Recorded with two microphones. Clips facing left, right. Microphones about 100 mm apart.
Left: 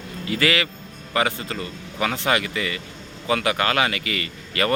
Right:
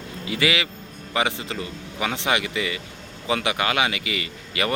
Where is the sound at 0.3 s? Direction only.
15° right (ahead or behind).